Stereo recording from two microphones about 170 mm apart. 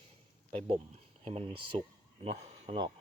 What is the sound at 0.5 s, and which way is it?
Speech, 30° right (ahead or behind).